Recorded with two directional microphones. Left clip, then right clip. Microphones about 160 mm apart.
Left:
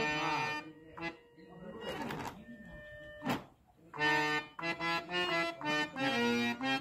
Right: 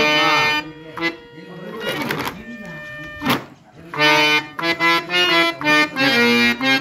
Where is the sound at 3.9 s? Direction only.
35° left (ahead or behind).